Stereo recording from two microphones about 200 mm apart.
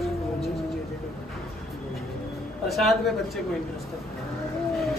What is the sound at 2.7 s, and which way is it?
Speech, centre (ahead or behind).